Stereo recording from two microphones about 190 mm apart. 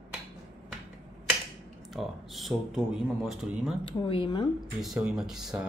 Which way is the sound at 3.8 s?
25° left (ahead or behind).